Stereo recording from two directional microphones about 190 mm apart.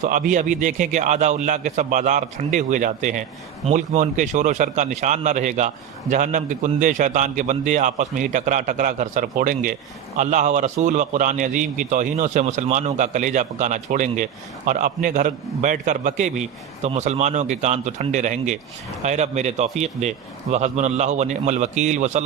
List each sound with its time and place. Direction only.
0.0 s a man's voice: 45° right (ahead or behind)